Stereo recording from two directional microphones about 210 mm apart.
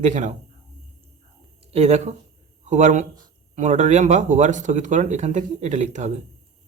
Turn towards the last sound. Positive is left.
turn(degrees=-35)  # may be behind; listen again after turning